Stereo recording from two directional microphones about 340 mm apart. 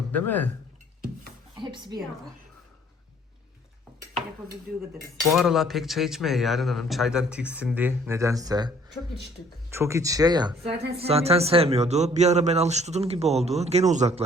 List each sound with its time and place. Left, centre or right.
0.1 s speech: centre
1.5 s a woman's voice: centre
5.3 s speech: centre